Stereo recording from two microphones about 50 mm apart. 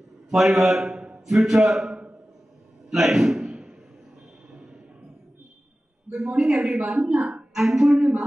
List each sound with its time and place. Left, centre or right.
0.3 s a man's voice: centre
2.9 s a sound: centre
6.1 s a man's voice: centre
7.0 s speech: right
7.5 s a man's voice: centre